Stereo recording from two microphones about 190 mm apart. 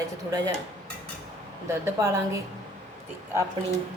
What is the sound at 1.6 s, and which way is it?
Speech, 15° right (ahead or behind).